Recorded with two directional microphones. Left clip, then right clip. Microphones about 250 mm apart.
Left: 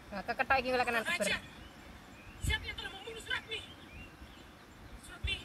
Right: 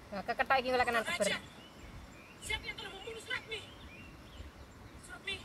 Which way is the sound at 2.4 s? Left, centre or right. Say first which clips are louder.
Left 2 dB; centre.